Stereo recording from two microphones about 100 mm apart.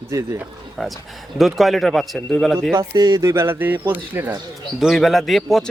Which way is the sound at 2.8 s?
40° right (ahead or behind).